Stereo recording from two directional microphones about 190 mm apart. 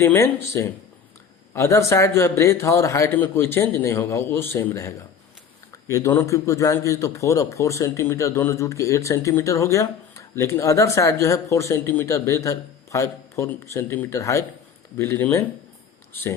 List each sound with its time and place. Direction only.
0.0 s speech: 10° left (ahead or behind)